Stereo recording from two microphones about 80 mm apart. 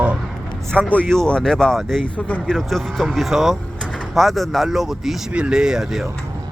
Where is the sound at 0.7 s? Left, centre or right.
Centre.